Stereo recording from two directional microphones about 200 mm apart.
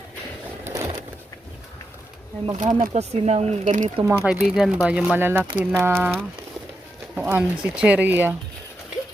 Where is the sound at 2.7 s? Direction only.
35° right (ahead or behind).